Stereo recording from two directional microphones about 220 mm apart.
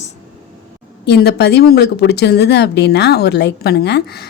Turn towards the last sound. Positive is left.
turn(degrees=50)  # may be behind; listen again after turning